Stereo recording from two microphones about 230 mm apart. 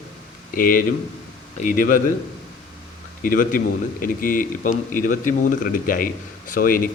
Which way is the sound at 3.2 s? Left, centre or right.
Left.